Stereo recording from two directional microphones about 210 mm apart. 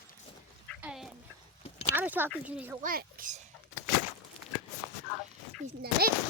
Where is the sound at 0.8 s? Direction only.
5° right (ahead or behind).